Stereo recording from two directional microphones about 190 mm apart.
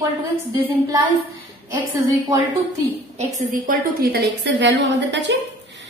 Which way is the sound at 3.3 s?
45° right (ahead or behind).